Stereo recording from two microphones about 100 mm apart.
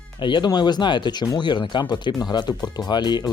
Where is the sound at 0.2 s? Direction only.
55° left (ahead or behind).